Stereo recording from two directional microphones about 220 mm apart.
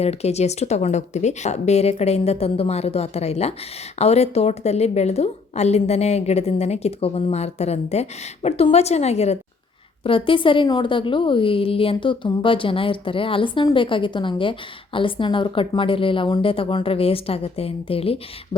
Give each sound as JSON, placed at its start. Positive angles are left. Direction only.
{"t": 0.0, "sound": "a woman's voice", "side_deg": 30}